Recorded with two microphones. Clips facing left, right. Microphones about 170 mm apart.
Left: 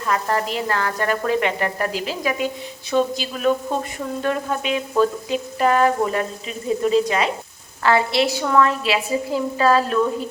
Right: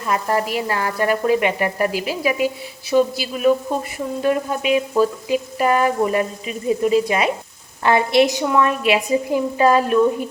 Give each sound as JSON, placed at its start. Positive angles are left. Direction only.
{"t": 0.0, "sound": "sizzle", "side_deg": -15}